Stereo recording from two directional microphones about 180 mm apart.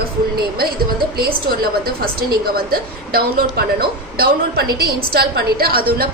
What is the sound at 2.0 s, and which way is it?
A woman's voice, 60° right (ahead or behind).